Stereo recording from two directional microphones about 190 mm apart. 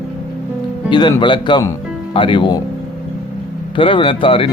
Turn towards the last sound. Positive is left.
turn(degrees=30)  # may be behind; listen again after turning